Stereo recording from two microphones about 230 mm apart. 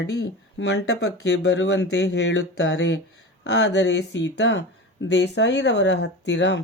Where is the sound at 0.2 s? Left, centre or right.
Left.